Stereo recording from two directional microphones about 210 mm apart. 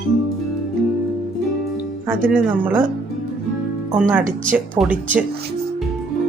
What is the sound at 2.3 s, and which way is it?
Speech, 10° right (ahead or behind).